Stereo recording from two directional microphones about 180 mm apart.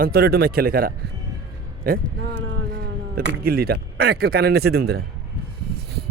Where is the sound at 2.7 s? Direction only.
55° right (ahead or behind).